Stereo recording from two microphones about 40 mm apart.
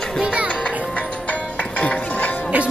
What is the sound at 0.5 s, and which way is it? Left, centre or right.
Music, left.